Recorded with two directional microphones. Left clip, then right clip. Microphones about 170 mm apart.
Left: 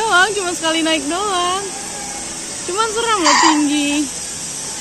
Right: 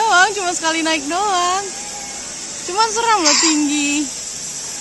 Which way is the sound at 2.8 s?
25° right (ahead or behind).